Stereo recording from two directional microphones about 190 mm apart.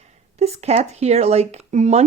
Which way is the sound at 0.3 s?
35° right (ahead or behind).